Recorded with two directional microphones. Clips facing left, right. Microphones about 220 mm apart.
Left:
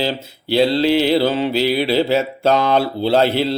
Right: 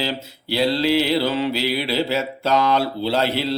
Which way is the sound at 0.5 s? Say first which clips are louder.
Left 4 dB; 25° left (ahead or behind).